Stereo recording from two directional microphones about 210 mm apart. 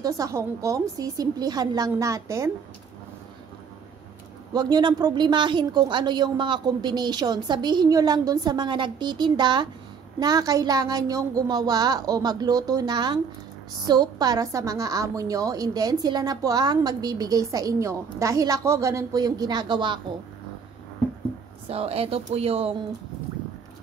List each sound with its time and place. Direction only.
0.0 s a woman's voice: 15° right (ahead or behind)
4.6 s a woman's voice: 20° right (ahead or behind)
21.6 s a woman's voice: 30° right (ahead or behind)